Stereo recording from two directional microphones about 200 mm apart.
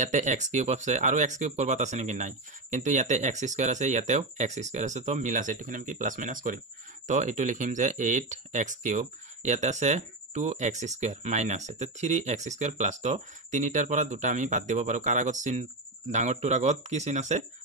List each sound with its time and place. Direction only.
0.0 s speech: 40° right (ahead or behind)